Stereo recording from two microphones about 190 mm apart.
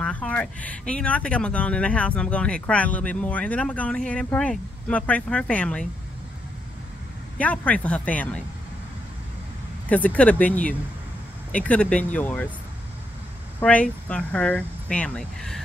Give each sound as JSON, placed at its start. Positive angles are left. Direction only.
{"t": 0.0, "sound": "speech", "side_deg": 5}
{"t": 7.3, "sound": "speech", "side_deg": 5}
{"t": 9.8, "sound": "speech", "side_deg": 10}
{"t": 13.6, "sound": "speech", "side_deg": 5}